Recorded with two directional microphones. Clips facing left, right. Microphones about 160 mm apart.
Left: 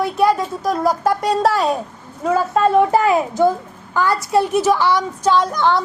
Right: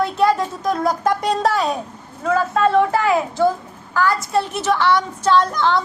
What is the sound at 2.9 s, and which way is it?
A woman's voice, 25° left (ahead or behind).